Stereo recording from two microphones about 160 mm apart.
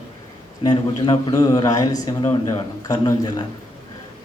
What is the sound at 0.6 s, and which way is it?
Speech, 25° left (ahead or behind).